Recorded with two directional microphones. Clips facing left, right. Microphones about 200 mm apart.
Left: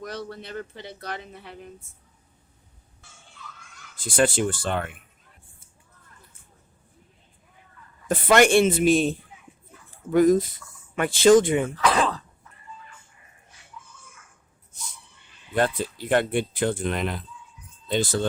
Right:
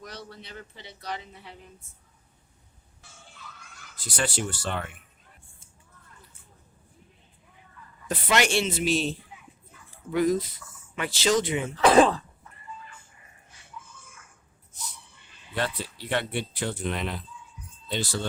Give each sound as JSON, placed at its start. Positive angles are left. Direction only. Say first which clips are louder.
{"t": 0.0, "sound": "a man's voice", "louder": "left 8 dB", "side_deg": 50}
{"t": 3.9, "sound": "speech", "louder": "left 8 dB", "side_deg": 50}
{"t": 8.0, "sound": "speech", "louder": "left 7 dB", "side_deg": 50}
{"t": 11.9, "sound": "cough", "louder": "right 7 dB", "side_deg": -25}
{"t": 15.5, "sound": "speech", "louder": "left 7 dB", "side_deg": 50}